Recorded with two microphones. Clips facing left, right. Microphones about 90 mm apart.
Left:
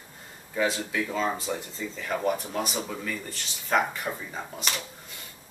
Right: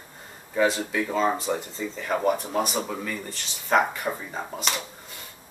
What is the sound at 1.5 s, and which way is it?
Speech, 10° right (ahead or behind).